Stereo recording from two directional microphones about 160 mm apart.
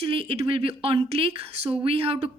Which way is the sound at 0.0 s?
35° right (ahead or behind).